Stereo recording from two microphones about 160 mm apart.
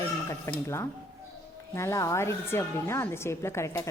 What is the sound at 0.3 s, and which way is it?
A woman's voice, 15° left (ahead or behind).